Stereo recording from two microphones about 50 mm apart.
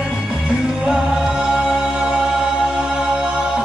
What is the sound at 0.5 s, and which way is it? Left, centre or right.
Music, centre.